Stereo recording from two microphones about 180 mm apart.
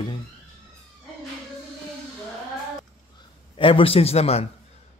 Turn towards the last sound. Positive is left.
turn(degrees=35)  # may be behind; listen again after turning